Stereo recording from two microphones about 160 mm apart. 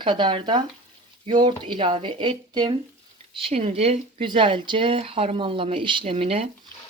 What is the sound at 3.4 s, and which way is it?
Speech, 40° right (ahead or behind).